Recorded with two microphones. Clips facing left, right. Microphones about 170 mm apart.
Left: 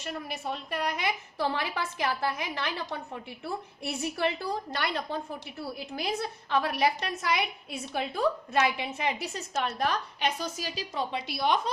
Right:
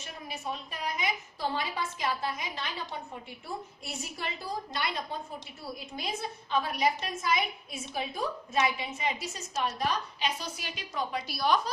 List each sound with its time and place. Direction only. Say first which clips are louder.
0.0 s a woman's voice: left 4 dB; 65° left (ahead or behind)
10.6 s a woman's voice: left 3 dB; 30° left (ahead or behind)